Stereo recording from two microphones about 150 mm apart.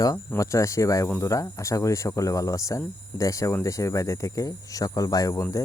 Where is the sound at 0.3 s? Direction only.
20° left (ahead or behind).